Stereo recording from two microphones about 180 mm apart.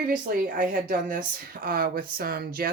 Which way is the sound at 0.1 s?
50° right (ahead or behind).